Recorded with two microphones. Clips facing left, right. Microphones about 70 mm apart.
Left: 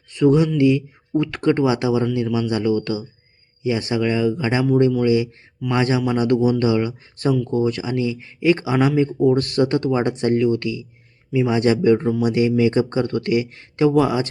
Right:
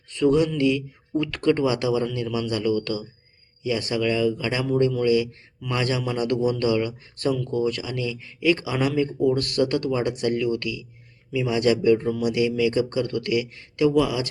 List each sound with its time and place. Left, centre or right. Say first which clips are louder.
0.1 s speech: left 4 dB; centre; by 14.3 s left